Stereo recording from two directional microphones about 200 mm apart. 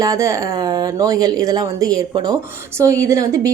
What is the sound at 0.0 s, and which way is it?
Speech, 15° right (ahead or behind).